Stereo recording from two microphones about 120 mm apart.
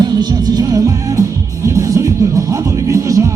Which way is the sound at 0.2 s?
35° right (ahead or behind).